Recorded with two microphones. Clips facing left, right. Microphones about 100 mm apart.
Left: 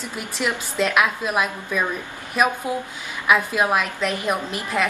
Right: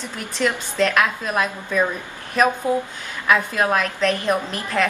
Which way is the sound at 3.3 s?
10° left (ahead or behind).